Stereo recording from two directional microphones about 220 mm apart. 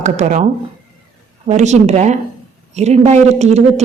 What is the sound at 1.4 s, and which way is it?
Speech, 30° right (ahead or behind).